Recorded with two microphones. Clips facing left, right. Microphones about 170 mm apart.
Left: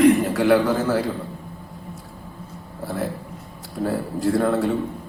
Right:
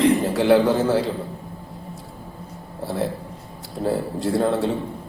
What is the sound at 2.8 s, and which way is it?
A man's voice, 25° right (ahead or behind).